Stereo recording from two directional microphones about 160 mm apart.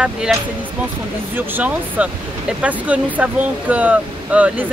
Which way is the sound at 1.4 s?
10° right (ahead or behind).